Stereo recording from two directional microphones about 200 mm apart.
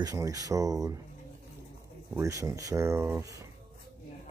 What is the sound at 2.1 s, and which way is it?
Speech, 15° right (ahead or behind).